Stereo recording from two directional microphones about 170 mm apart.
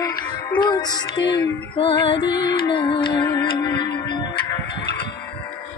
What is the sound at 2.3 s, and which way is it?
Music, 80° left.